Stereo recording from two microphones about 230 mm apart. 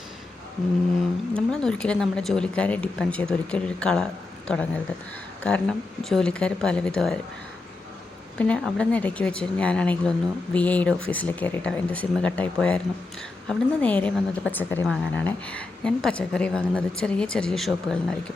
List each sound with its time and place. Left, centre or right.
1.3 s a woman's voice: centre
8.4 s a woman's voice: centre